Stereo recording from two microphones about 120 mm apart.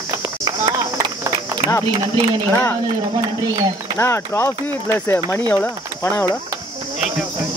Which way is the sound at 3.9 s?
20° left (ahead or behind).